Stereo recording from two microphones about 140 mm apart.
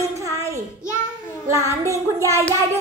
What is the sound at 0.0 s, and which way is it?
Child singing, 20° right (ahead or behind).